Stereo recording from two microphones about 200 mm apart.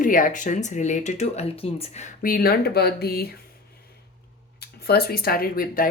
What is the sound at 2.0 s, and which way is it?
Speech, 45° left (ahead or behind).